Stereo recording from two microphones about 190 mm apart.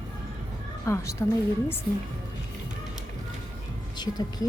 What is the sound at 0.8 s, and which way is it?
Speech, 15° left (ahead or behind).